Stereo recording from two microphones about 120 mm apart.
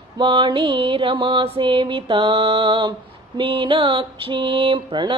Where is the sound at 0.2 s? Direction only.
45° right (ahead or behind).